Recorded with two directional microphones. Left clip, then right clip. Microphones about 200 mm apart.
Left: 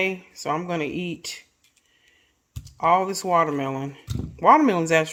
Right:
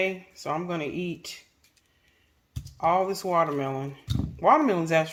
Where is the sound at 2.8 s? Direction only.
50° left (ahead or behind).